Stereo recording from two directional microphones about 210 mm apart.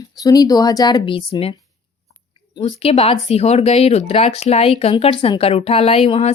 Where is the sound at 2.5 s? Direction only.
25° left (ahead or behind).